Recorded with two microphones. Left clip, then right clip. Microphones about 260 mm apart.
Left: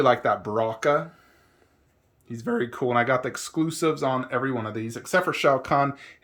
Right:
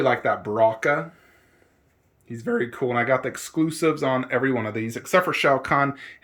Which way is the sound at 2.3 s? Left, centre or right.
Centre.